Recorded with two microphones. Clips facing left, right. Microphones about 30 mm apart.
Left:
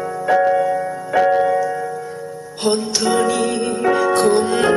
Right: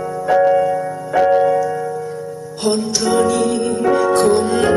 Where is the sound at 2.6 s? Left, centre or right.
Centre.